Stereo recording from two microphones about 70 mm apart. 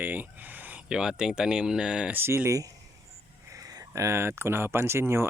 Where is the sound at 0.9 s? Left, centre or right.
Centre.